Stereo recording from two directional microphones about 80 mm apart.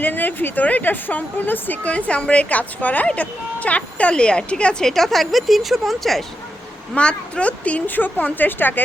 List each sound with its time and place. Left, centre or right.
0.0 s a woman's voice: left; by 6.2 s centre
6.9 s a woman's voice: centre